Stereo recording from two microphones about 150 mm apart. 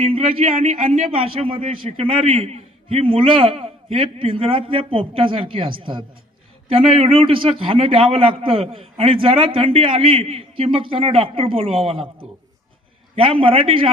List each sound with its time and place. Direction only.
0.0 s a man's voice: 40° right (ahead or behind)
13.1 s a man's voice: 35° right (ahead or behind)